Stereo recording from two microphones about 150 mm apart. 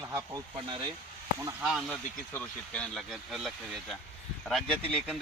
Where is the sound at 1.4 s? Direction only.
15° right (ahead or behind).